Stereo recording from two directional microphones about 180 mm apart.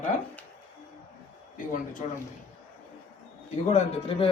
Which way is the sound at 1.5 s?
45° left (ahead or behind).